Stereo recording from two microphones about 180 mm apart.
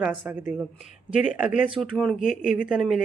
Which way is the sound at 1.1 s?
45° left (ahead or behind).